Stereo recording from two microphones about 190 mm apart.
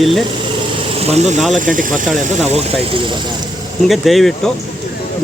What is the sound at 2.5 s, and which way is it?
Speech, 25° right (ahead or behind).